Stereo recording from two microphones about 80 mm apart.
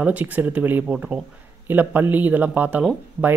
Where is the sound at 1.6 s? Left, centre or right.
Right.